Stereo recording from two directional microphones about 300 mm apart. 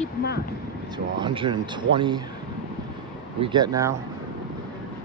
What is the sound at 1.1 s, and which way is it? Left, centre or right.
Speech, centre.